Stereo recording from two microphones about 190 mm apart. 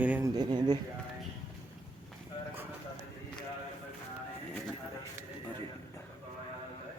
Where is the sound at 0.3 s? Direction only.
25° right (ahead or behind).